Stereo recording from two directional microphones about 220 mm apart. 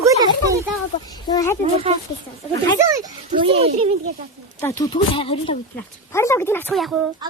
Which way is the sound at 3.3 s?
25° right (ahead or behind).